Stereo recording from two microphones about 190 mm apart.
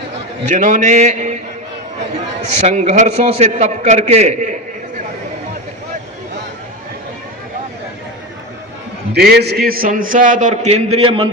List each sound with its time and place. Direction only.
0.4 s a man's voice: 40° right (ahead or behind)
2.4 s a man's voice: 35° right (ahead or behind)
9.1 s a man's voice: 55° right (ahead or behind); by 11.3 s 30° right (ahead or behind)